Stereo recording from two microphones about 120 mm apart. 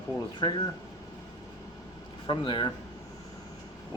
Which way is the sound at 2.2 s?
45° left (ahead or behind).